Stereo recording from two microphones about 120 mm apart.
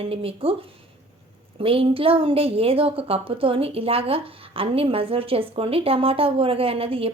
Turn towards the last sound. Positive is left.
turn(degrees=-50)  # may be behind; listen again after turning